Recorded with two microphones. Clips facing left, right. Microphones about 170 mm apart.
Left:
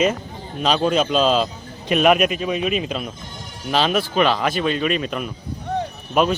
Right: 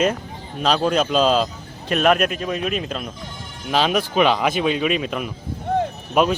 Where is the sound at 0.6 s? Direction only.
Centre (ahead or behind).